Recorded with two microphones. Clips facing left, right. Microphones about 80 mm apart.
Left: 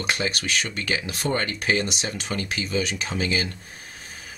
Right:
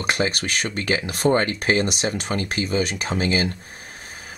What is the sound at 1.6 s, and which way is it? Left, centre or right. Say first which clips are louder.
Speech: right 4 dB; right.